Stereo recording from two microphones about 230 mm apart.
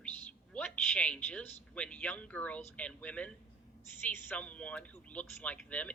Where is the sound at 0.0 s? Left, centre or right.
Centre.